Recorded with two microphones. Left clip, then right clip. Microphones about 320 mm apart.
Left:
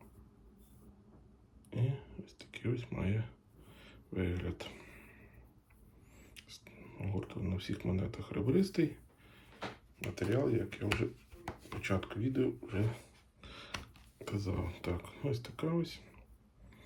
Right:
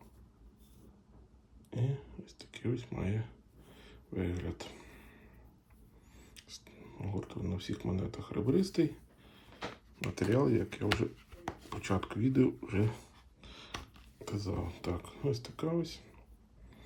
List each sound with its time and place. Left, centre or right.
1.7 s a sound: centre
6.1 s speech: centre
10.0 s speech: centre
13.4 s speech: centre